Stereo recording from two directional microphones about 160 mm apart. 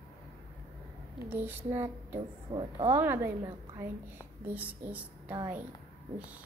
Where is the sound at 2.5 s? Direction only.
30° right (ahead or behind).